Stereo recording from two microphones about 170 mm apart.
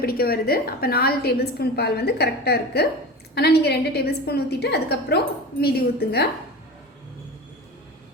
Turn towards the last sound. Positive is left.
turn(degrees=65)  # may be behind; listen again after turning